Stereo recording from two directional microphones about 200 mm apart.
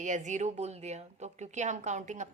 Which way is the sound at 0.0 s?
40° right (ahead or behind).